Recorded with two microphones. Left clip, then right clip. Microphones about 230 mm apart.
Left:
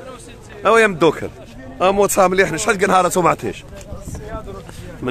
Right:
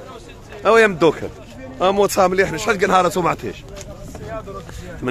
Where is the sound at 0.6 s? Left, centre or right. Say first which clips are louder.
Even; centre.